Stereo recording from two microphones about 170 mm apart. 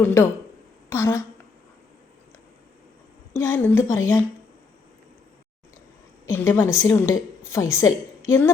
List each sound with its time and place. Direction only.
0.0 s a woman's voice: 15° left (ahead or behind)
3.3 s a woman's voice: 10° left (ahead or behind)
6.2 s a woman's voice: 15° left (ahead or behind)